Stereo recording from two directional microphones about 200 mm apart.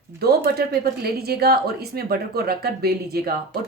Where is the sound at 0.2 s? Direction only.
50° right (ahead or behind).